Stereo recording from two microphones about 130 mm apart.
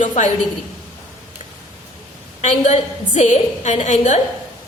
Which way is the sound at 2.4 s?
60° left (ahead or behind).